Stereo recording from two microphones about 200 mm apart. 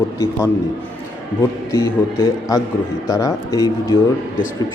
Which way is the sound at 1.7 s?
15° left (ahead or behind).